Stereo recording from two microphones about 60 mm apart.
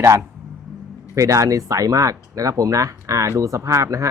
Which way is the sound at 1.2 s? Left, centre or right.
Right.